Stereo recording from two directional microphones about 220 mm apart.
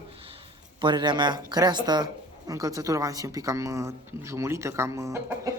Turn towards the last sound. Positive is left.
turn(degrees=-10)  # may be behind; listen again after turning